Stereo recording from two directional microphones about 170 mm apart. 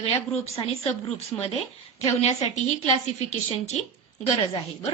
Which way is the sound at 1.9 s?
40° left (ahead or behind).